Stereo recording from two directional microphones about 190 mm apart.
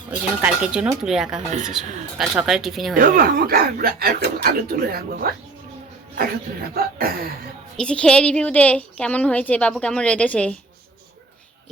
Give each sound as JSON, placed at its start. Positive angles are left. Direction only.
{"t": 0.1, "sound": "speech", "side_deg": -5}
{"t": 2.9, "sound": "speech", "side_deg": -45}
{"t": 6.7, "sound": "speech", "side_deg": -50}
{"t": 7.8, "sound": "a woman's voice", "side_deg": 5}